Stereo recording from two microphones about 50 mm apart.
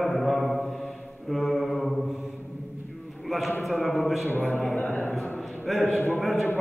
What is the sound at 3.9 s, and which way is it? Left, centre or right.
Mantra, centre.